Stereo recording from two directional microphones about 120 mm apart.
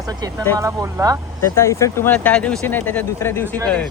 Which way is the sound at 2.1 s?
10° left (ahead or behind).